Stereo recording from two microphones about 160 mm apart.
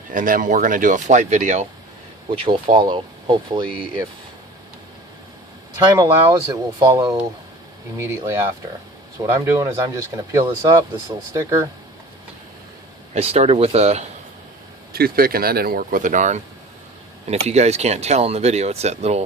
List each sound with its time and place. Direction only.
0.1 s speech: 55° right (ahead or behind)
2.3 s speech: 35° right (ahead or behind)
6.5 s speech: 25° right (ahead or behind)
13.1 s speech: 40° right (ahead or behind)
14.9 s speech: 70° right (ahead or behind); by 19.2 s 45° right (ahead or behind)